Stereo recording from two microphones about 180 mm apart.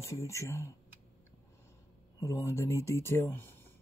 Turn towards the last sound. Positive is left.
turn(degrees=10)  # may be behind; listen again after turning